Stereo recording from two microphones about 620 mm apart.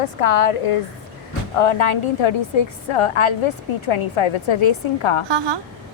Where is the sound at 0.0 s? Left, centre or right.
Left.